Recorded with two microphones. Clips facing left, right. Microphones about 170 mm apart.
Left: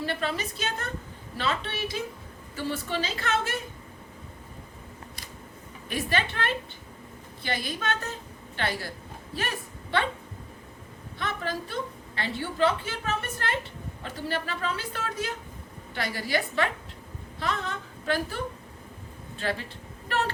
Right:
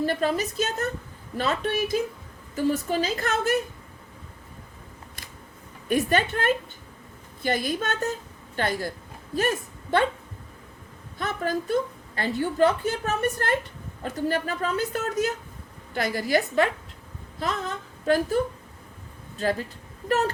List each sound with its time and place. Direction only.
0.0 s a woman's voice: 45° right (ahead or behind)
5.9 s a woman's voice: 45° right (ahead or behind)
11.2 s a woman's voice: 45° right (ahead or behind)
20.1 s a sound: 40° right (ahead or behind)